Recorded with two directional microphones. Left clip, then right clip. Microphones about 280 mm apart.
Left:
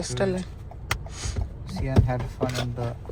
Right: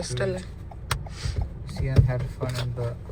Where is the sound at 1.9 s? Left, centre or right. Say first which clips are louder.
Left 2 dB; left.